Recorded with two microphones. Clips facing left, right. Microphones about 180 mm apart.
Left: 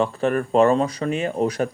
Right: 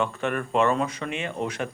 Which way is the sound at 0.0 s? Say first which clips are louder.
Left 6 dB; 35° left (ahead or behind).